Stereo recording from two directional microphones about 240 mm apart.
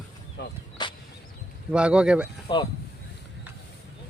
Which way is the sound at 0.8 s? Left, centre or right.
Centre.